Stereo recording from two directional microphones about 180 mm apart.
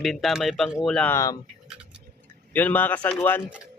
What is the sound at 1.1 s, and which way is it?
Speech, 20° left (ahead or behind).